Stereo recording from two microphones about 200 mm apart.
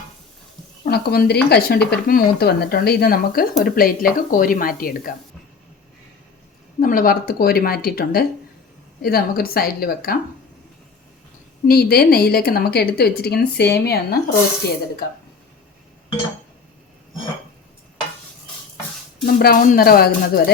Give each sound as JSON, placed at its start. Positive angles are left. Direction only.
{"t": 0.9, "sound": "speech", "side_deg": 50}
{"t": 6.7, "sound": "speech", "side_deg": 45}
{"t": 11.6, "sound": "speech", "side_deg": 50}
{"t": 19.2, "sound": "speech", "side_deg": 50}